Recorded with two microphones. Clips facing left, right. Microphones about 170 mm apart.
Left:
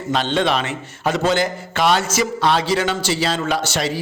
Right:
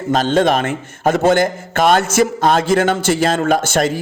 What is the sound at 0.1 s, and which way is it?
A man's voice, 45° right (ahead or behind).